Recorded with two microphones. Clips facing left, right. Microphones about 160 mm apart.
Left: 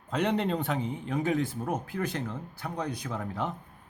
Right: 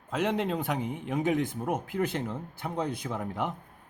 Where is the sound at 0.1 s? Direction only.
5° right (ahead or behind).